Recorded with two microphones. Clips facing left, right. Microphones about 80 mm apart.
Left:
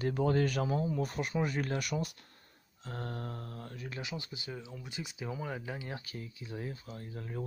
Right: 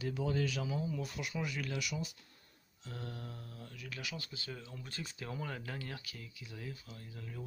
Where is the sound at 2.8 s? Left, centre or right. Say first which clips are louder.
Left 5 dB; left.